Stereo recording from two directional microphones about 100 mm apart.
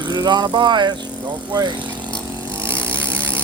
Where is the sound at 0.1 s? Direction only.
40° right (ahead or behind).